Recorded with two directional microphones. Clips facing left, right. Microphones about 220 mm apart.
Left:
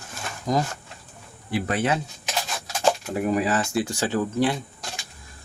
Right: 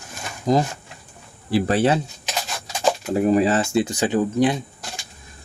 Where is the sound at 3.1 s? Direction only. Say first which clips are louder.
Right 5 dB; 30° right (ahead or behind).